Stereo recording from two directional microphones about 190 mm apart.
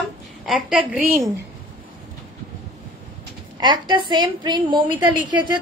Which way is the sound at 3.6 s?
25° right (ahead or behind).